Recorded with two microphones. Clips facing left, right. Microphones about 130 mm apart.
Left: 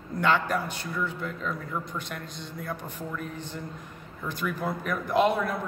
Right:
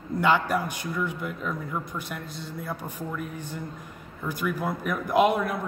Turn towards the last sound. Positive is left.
turn(degrees=-10)  # may be behind; listen again after turning